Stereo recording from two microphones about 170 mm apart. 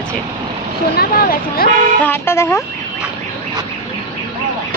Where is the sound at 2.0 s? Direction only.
15° left (ahead or behind).